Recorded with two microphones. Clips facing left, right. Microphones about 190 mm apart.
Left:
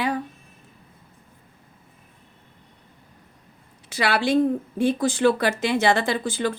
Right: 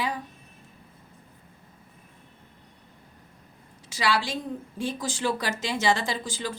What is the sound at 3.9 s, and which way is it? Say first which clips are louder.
Speech: left 7 dB; 60° left (ahead or behind).